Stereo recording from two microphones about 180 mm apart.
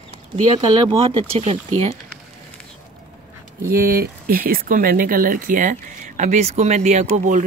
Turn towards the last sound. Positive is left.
turn(degrees=-45)  # may be behind; listen again after turning